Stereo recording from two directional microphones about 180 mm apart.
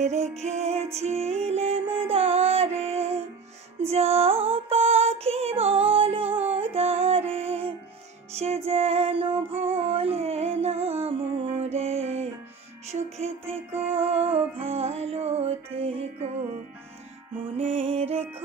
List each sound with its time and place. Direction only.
0.0 s music: 40° right (ahead or behind)
14.6 s music: 35° right (ahead or behind)
17.6 s music: 30° right (ahead or behind)